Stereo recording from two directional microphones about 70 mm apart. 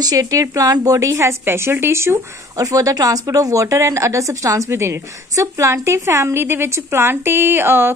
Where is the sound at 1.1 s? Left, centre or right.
Right.